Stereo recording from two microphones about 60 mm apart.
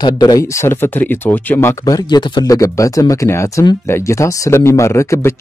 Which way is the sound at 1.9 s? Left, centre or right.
Left.